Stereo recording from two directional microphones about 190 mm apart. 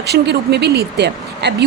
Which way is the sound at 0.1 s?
60° right (ahead or behind).